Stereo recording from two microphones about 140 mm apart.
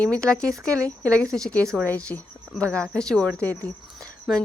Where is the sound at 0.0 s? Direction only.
5° left (ahead or behind).